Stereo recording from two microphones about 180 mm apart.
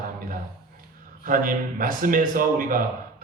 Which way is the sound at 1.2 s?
50° right (ahead or behind).